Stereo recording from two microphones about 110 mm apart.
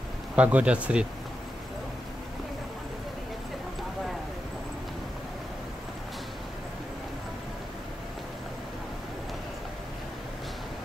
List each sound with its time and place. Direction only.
0.4 s speech: 10° right (ahead or behind)